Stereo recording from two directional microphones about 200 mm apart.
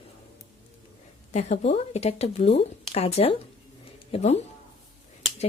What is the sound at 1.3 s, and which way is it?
Speech, 35° left (ahead or behind).